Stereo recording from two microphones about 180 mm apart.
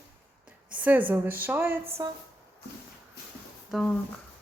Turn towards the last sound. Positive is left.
turn(degrees=0)  # may be behind; listen again after turning